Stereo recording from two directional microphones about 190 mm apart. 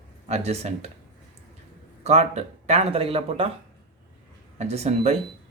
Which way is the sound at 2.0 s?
35° right (ahead or behind).